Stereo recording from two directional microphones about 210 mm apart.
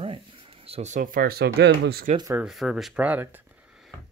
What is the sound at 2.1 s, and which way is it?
Speech, 15° right (ahead or behind).